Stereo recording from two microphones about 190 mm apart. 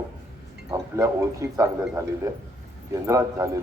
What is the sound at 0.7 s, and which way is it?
A man's voice, 15° right (ahead or behind).